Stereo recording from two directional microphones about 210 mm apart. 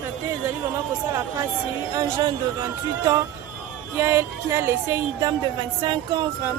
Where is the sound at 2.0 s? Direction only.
20° right (ahead or behind).